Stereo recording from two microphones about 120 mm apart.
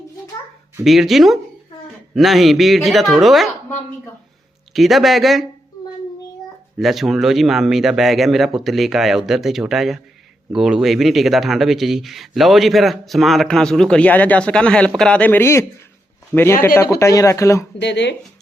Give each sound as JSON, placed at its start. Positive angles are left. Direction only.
{"t": 0.9, "sound": "speech", "side_deg": 0}
{"t": 4.7, "sound": "speech", "side_deg": 0}
{"t": 6.7, "sound": "speech", "side_deg": 0}